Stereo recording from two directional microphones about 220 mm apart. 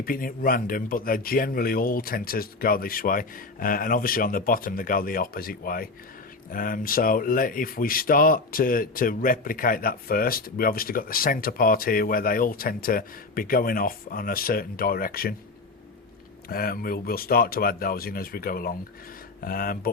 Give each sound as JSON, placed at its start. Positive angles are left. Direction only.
{"t": 0.0, "sound": "speech", "side_deg": 40}
{"t": 16.5, "sound": "speech", "side_deg": 40}